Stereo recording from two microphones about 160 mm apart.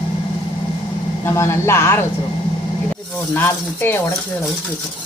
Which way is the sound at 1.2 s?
20° left (ahead or behind).